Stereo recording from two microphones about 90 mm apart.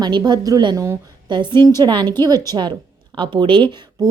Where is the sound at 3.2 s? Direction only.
65° right (ahead or behind).